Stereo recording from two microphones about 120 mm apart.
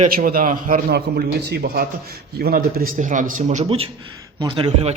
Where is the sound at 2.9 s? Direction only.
90° right.